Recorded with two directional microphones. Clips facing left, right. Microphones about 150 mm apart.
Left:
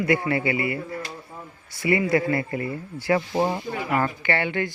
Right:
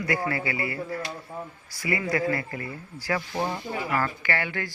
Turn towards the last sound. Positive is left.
turn(degrees=20)  # may be behind; listen again after turning